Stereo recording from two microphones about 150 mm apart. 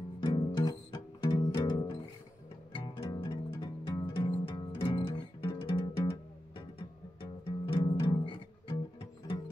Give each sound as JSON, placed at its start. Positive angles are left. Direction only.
{"t": 0.2, "sound": "music", "side_deg": 30}
{"t": 7.2, "sound": "music", "side_deg": 35}